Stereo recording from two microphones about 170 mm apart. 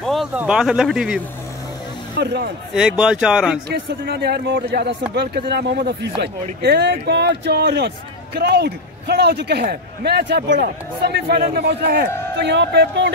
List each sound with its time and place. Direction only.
0.0 s speech: centre (ahead or behind)
2.1 s a man's voice: 75° right (ahead or behind)
3.0 s speech: 5° right (ahead or behind)
3.6 s a man's voice: 85° right
12.4 s speech: 85° right